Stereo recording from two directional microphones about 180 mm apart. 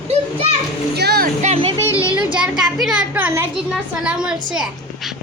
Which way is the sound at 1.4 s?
35° right (ahead or behind).